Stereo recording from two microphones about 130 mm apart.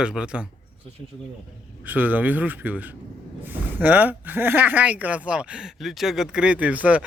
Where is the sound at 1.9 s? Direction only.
15° right (ahead or behind).